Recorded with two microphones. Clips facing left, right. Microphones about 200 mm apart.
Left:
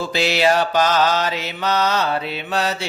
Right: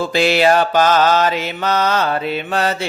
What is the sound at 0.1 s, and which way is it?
Mantra, 50° right (ahead or behind).